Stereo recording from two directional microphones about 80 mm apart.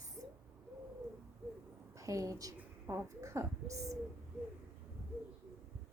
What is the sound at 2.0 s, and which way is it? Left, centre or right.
A woman's voice, right.